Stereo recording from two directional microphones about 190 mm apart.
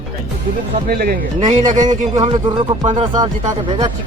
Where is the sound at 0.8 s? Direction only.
50° right (ahead or behind).